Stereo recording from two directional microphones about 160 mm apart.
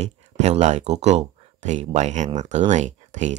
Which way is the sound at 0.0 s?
45° right (ahead or behind).